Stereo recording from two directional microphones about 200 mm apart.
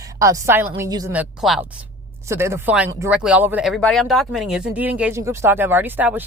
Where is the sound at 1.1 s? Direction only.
5° right (ahead or behind).